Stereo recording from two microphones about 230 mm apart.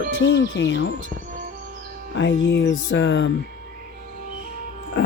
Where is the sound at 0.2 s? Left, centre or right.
Left.